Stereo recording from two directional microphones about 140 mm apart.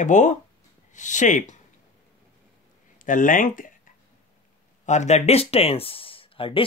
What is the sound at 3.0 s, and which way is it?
Speech, 70° left (ahead or behind).